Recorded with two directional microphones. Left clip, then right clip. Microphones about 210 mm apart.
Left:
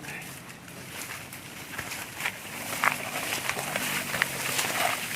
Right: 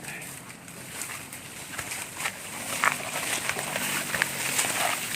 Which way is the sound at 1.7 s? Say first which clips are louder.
Right 1 dB; 15° right (ahead or behind).